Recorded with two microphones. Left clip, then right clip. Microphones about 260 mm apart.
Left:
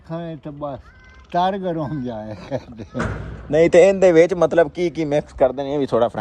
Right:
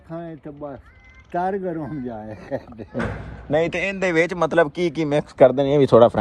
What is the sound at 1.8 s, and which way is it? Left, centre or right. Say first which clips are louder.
Speech: left 3 dB; left.